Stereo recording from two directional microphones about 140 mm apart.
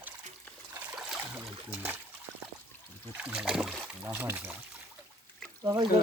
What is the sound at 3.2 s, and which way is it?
Speech, 5° right (ahead or behind).